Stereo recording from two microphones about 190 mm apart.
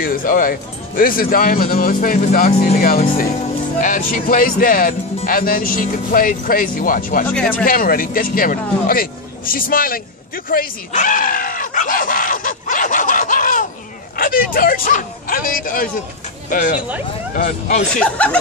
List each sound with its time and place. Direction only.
0.0 s speech: 45° left (ahead or behind)
3.8 s speech: 45° left (ahead or behind)
17.9 s speech: 5° left (ahead or behind)